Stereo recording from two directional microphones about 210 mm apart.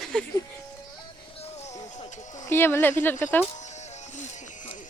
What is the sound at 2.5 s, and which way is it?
Speech, 10° left (ahead or behind).